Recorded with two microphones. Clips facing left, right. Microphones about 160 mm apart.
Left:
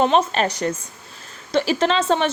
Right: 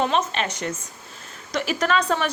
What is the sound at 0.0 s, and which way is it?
A woman's voice, 30° left (ahead or behind).